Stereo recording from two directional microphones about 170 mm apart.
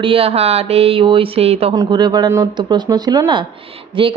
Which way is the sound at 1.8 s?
25° right (ahead or behind).